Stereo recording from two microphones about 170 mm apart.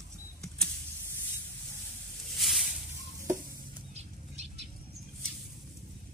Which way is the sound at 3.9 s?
40° right (ahead or behind).